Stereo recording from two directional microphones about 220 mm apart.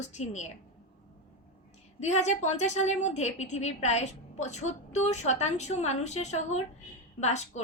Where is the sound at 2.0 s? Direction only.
30° left (ahead or behind).